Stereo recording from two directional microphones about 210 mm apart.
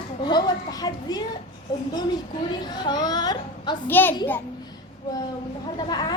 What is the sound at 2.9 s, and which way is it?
A child's voice, 20° left (ahead or behind).